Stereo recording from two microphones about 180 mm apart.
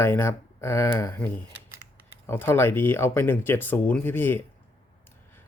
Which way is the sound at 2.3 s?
10° left (ahead or behind).